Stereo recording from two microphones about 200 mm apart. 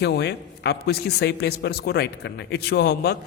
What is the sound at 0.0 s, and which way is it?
A man's voice, 55° left (ahead or behind).